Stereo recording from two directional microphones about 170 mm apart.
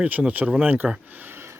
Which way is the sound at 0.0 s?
10° right (ahead or behind).